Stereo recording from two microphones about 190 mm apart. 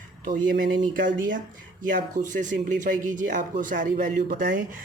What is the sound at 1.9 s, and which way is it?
Speech, 45° right (ahead or behind).